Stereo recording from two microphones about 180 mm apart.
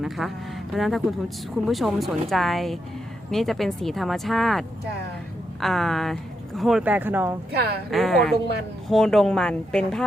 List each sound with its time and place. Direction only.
0.2 s speech: centre (ahead or behind)
7.5 s a woman's voice: 65° right (ahead or behind)
7.9 s speech: centre (ahead or behind)